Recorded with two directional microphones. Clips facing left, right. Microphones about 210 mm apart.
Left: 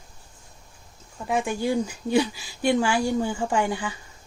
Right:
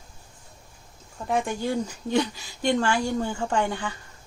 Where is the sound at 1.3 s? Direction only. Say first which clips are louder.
Left 1 dB; 10° left (ahead or behind).